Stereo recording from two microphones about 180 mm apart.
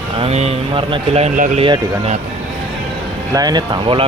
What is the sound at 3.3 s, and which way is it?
Speech, 20° right (ahead or behind).